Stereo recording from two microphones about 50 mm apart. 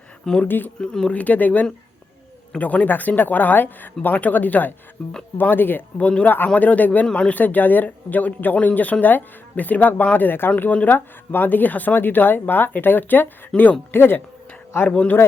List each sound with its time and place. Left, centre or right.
0.4 s speech: left
0.8 s speech: centre
1.1 s speech: left
6.0 s speech: left
6.2 s speech: left
7.1 s speech: centre
7.3 s speech: left
13.5 s speech: centre
13.9 s speech: left
14.8 s speech: left